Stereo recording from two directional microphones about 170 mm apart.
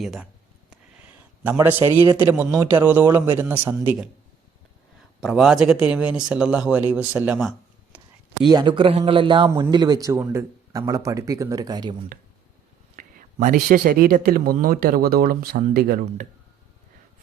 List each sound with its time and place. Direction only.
0.0 s speech: centre (ahead or behind)
0.7 s a sound: 10° right (ahead or behind)
2.1 s a man's voice: 15° right (ahead or behind)
5.2 s speech: centre (ahead or behind)
7.9 s a sound: 10° right (ahead or behind)
8.4 s speech: 25° right (ahead or behind)
13.0 s speech: 50° right (ahead or behind)